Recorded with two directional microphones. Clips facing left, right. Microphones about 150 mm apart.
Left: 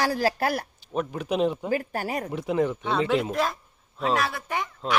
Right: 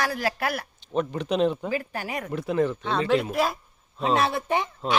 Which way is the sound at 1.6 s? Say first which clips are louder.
Left 2 dB; 45° left (ahead or behind).